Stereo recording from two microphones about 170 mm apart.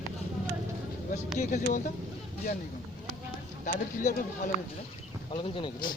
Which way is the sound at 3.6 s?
50° left (ahead or behind).